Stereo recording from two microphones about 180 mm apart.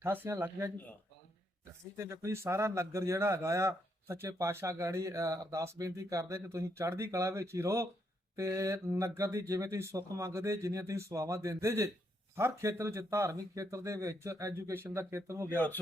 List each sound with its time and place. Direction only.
0.0 s speech: 10° right (ahead or behind)
2.0 s speech: 15° right (ahead or behind)
15.4 s speech: 10° left (ahead or behind)